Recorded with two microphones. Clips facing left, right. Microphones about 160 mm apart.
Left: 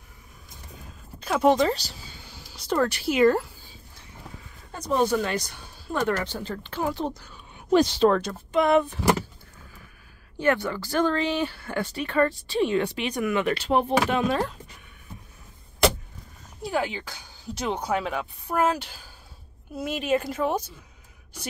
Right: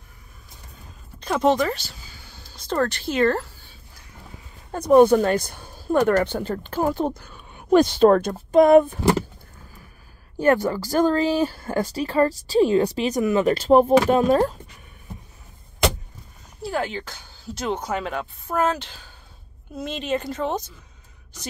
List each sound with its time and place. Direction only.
1.2 s speech: 5° left (ahead or behind)
1.6 s speech: 35° left (ahead or behind)
2.2 s a sound: 15° left (ahead or behind)
4.7 s speech: 55° right (ahead or behind)
10.4 s speech: 40° right (ahead or behind)
16.6 s speech: 10° left (ahead or behind)